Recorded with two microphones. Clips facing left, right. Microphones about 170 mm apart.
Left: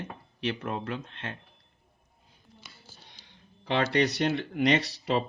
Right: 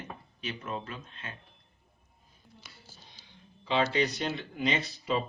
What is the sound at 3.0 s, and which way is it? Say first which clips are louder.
Speech: even; 70° left (ahead or behind).